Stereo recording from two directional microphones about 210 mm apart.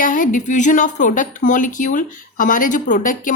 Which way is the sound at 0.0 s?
40° left (ahead or behind).